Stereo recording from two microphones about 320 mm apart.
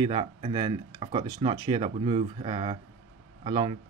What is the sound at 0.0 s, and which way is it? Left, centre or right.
Speech, centre.